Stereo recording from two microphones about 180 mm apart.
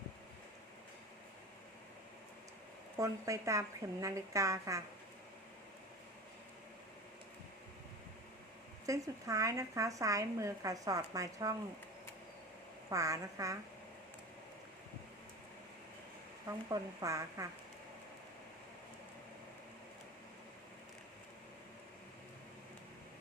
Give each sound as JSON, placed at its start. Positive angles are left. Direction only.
{"t": 3.0, "sound": "speech", "side_deg": -15}
{"t": 8.9, "sound": "speech", "side_deg": -20}
{"t": 12.9, "sound": "speech", "side_deg": -20}
{"t": 16.5, "sound": "speech", "side_deg": -20}